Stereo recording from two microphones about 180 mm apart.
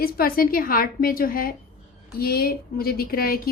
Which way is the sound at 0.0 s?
55° left (ahead or behind).